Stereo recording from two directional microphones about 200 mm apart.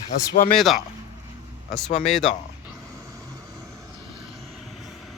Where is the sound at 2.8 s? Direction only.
15° right (ahead or behind).